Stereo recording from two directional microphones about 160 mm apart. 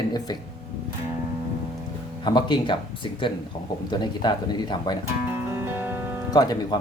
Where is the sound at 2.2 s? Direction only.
30° left (ahead or behind).